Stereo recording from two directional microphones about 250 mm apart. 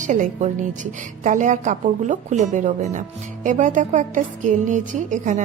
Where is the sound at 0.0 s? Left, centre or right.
Right.